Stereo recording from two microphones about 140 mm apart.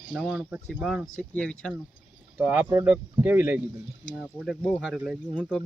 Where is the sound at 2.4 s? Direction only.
10° right (ahead or behind).